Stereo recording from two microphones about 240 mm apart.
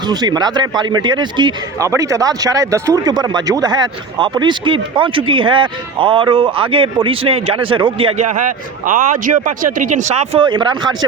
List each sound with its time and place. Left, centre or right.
0.1 s speech: centre